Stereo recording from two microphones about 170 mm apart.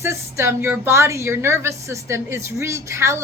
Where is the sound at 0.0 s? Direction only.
15° right (ahead or behind).